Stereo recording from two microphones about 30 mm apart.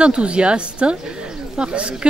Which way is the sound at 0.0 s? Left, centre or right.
Right.